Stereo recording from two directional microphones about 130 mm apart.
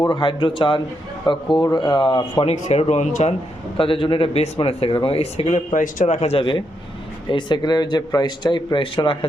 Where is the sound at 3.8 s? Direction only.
45° left (ahead or behind).